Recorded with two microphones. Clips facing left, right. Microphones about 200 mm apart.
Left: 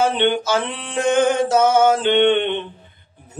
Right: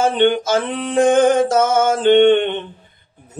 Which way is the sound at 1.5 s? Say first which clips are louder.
Left 1 dB; 45° right (ahead or behind).